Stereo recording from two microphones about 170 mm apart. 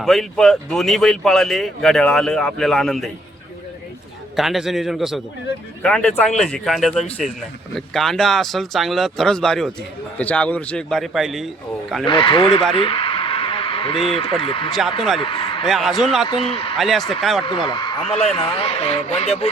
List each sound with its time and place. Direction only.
0.0 s speech: centre (ahead or behind)
4.4 s speech: centre (ahead or behind)
12.0 s a man's voice: 30° left (ahead or behind)
12.7 s a sound: 35° left (ahead or behind)
14.4 s speech: 30° left (ahead or behind)
15.2 s a sound: 30° left (ahead or behind)
15.6 s speech: centre (ahead or behind)
16.2 s speech: 30° left (ahead or behind)
16.7 s speech: centre (ahead or behind)
17.4 s a man's voice: 30° left (ahead or behind)